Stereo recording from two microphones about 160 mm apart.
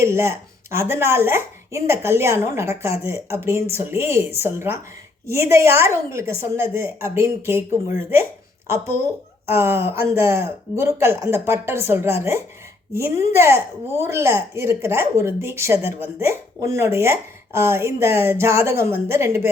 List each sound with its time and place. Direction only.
0.0 s speech: 15° right (ahead or behind)